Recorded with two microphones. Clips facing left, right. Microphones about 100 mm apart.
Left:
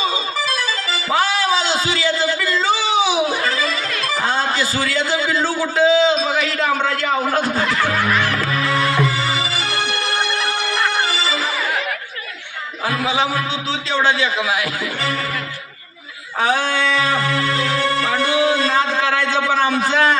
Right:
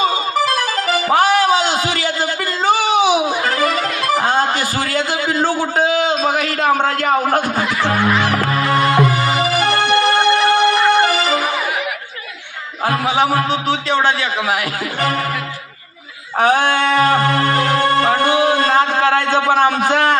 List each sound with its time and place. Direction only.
0.0 s music: 55° right (ahead or behind)
7.8 s music: 20° right (ahead or behind)
9.0 s music: 55° right (ahead or behind)
10.8 s music: 20° right (ahead or behind)
11.0 s music: 55° right (ahead or behind)
12.8 s a man's voice: 50° right (ahead or behind)
16.4 s music: 55° right (ahead or behind)